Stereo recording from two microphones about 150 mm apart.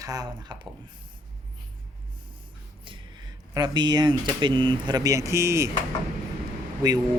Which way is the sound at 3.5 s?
30° right (ahead or behind).